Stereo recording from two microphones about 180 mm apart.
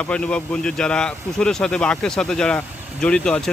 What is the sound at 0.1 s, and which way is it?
Speech, 5° left (ahead or behind).